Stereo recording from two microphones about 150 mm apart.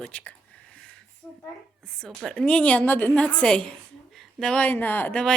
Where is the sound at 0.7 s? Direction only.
5° left (ahead or behind).